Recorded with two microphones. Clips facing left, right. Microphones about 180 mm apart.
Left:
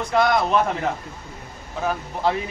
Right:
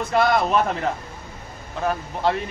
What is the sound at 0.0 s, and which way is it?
Speech, centre (ahead or behind).